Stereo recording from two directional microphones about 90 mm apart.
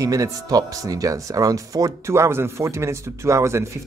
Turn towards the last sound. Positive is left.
turn(degrees=-30)  # may be behind; listen again after turning